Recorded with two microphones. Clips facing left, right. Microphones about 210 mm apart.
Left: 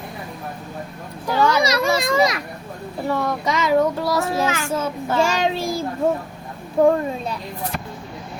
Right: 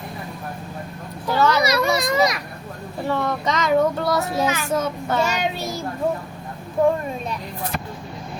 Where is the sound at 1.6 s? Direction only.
25° left (ahead or behind).